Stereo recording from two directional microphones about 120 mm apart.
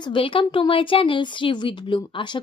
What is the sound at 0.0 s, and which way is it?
Speech, 45° left (ahead or behind).